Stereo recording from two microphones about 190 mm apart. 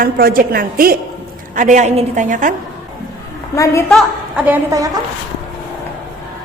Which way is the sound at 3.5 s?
15° left (ahead or behind).